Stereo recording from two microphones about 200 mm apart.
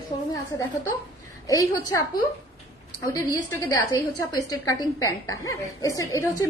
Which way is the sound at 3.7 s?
20° left (ahead or behind).